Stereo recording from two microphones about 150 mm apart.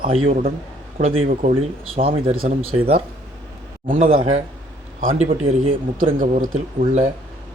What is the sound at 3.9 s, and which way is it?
Speech, 65° right (ahead or behind).